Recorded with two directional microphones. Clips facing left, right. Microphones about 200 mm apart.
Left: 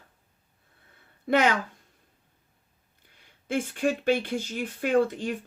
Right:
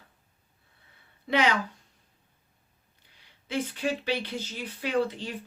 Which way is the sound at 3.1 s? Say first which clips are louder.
Left 2 dB; 50° left (ahead or behind).